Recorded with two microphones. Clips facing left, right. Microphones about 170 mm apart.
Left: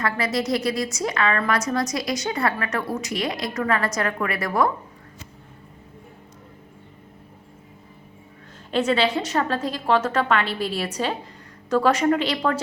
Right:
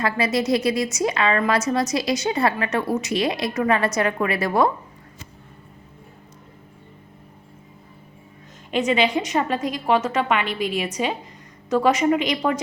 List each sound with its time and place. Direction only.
0.0 s a woman's voice: 25° right (ahead or behind)
8.7 s a woman's voice: 10° right (ahead or behind)